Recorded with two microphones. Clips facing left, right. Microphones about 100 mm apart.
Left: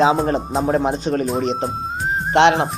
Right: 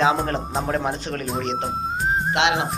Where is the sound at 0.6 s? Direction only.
20° left (ahead or behind).